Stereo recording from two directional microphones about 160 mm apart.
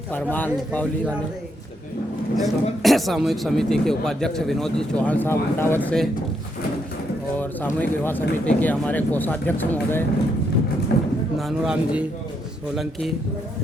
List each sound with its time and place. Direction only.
0.1 s speech: 10° left (ahead or behind)
2.3 s a man's voice: centre (ahead or behind)
7.3 s speech: 10° left (ahead or behind)
10.9 s a sound: 85° left
11.3 s a man's voice: centre (ahead or behind)